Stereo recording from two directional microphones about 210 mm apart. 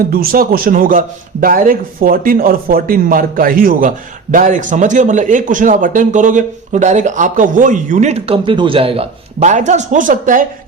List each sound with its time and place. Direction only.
0.1 s a man's voice: 45° right (ahead or behind)